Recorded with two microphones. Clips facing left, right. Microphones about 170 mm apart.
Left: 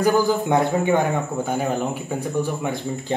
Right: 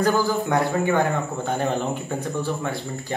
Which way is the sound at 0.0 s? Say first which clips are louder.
Left 2 dB; 20° left (ahead or behind).